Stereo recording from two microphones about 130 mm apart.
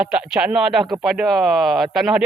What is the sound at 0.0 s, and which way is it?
Speech, 5° right (ahead or behind).